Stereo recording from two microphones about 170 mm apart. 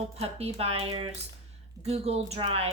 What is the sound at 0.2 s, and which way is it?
Speech, 40° right (ahead or behind).